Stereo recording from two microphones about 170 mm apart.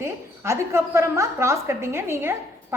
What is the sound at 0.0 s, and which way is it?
A woman's voice, 15° right (ahead or behind).